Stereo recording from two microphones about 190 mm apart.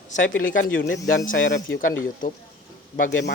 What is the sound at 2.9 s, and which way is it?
Speech, 45° left (ahead or behind).